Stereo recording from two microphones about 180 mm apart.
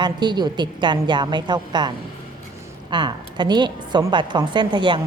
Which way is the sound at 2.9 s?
25° right (ahead or behind).